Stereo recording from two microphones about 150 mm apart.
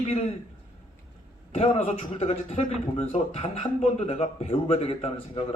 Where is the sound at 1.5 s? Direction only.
40° left (ahead or behind).